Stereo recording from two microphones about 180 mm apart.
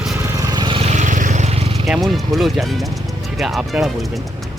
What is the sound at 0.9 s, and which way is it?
Vehicle, 45° right (ahead or behind).